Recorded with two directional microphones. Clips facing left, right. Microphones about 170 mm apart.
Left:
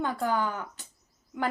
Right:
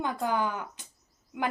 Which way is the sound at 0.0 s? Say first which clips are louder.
Left 1 dB; 15° right (ahead or behind).